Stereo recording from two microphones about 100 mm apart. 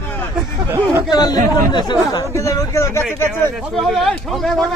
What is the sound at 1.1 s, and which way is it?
Speech, 45° left (ahead or behind).